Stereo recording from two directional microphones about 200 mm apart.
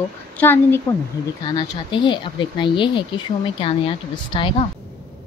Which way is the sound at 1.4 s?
20° left (ahead or behind).